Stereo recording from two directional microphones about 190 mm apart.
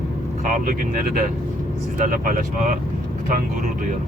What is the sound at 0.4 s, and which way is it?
Speech, 45° right (ahead or behind).